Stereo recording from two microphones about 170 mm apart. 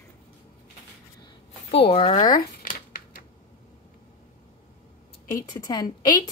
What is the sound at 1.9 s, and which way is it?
Speech, 35° left (ahead or behind).